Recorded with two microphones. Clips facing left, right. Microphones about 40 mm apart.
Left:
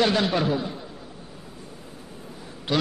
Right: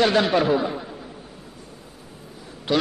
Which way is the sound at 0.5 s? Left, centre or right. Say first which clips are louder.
Right 6 dB; right.